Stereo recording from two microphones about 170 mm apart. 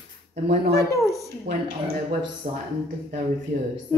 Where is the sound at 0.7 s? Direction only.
20° left (ahead or behind).